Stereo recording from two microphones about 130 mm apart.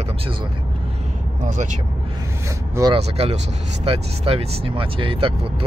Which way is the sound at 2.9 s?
50° right (ahead or behind).